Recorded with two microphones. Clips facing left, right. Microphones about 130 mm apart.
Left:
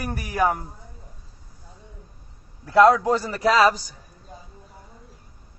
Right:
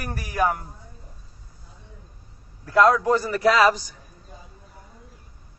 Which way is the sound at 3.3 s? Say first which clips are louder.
Even; 30° left (ahead or behind).